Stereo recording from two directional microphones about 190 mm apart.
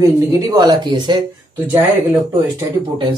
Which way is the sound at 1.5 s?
10° right (ahead or behind).